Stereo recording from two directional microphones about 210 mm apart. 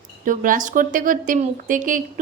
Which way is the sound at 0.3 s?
40° right (ahead or behind).